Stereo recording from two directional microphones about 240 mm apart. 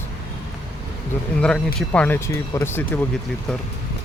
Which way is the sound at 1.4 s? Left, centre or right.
Centre.